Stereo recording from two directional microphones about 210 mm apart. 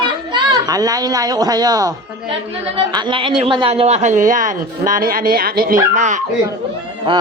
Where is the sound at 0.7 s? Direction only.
15° right (ahead or behind).